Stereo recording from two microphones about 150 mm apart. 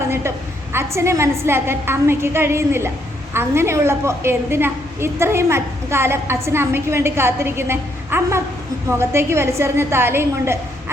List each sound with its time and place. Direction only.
0.1 s a woman's voice: 15° right (ahead or behind)